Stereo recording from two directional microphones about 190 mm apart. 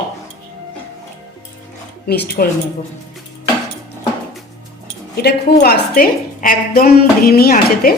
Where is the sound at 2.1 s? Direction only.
55° left (ahead or behind).